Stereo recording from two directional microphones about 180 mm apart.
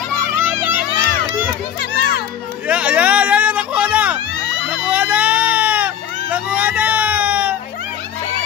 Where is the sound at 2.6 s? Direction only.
5° right (ahead or behind).